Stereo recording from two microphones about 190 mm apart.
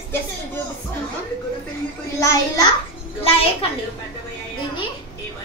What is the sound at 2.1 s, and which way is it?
Speech, 15° left (ahead or behind).